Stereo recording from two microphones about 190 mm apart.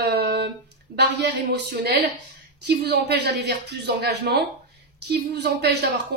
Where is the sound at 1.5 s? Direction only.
60° right (ahead or behind).